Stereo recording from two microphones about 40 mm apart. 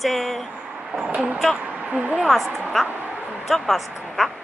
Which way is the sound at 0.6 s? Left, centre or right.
Centre.